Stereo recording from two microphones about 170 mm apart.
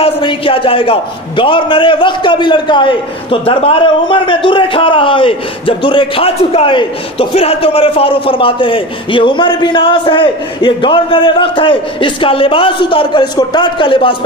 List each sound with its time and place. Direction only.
0.0 s a man's voice: 30° left (ahead or behind)